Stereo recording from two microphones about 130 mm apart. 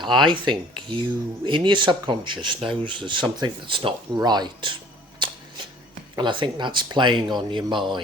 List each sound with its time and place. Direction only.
0.0 s speech: 35° right (ahead or behind)
5.2 s shuffling cards: 35° right (ahead or behind)
6.1 s speech: 35° right (ahead or behind)